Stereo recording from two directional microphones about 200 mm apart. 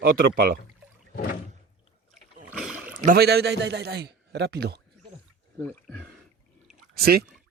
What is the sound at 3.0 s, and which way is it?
A man's voice, 50° right (ahead or behind).